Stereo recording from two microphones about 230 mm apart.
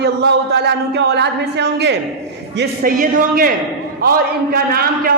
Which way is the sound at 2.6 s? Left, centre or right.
Right.